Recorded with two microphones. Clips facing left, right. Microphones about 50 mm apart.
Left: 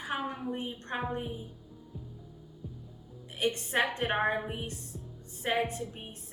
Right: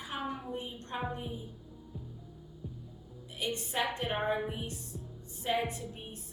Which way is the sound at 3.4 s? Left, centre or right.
Left.